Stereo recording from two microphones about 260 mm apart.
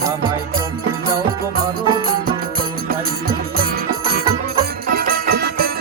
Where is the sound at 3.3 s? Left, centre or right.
Right.